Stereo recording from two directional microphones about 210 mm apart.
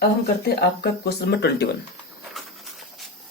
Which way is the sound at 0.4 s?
50° left (ahead or behind).